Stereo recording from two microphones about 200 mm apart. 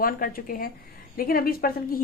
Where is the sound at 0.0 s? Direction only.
45° left (ahead or behind).